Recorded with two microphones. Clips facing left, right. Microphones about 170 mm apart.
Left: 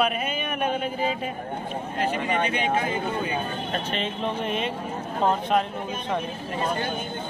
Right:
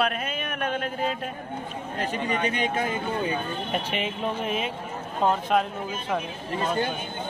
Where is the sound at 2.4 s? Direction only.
40° right (ahead or behind).